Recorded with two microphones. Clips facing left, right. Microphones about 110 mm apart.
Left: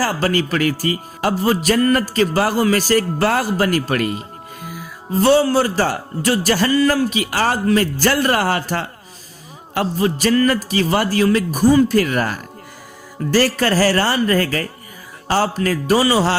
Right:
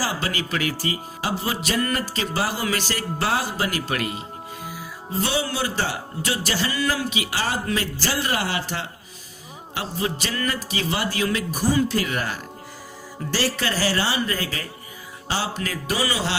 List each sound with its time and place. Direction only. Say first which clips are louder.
0.0 s speech: left 8 dB; 45° left (ahead or behind)
15.5 s speech: left 10 dB; 40° left (ahead or behind)